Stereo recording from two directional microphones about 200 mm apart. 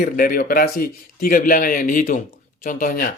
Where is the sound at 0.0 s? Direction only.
45° left (ahead or behind).